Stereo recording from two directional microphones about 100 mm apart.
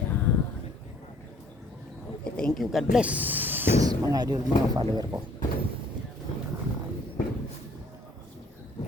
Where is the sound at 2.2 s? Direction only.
10° left (ahead or behind).